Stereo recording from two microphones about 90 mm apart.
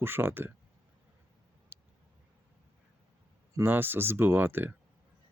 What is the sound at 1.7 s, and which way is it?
Vehicle, 25° right (ahead or behind).